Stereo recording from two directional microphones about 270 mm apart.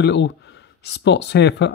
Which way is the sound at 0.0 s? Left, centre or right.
Left.